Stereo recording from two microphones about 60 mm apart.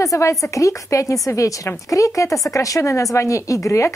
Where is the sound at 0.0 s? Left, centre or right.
Left.